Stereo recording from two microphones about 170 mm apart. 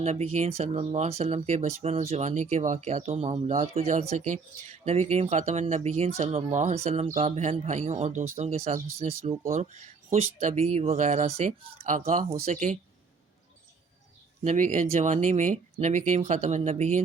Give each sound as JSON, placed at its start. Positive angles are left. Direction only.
{"t": 0.0, "sound": "speech", "side_deg": -35}
{"t": 14.4, "sound": "speech", "side_deg": -45}